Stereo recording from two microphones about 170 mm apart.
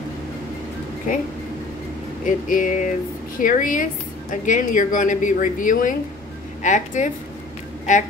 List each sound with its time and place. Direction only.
2.2 s a woman's voice: 50° left (ahead or behind)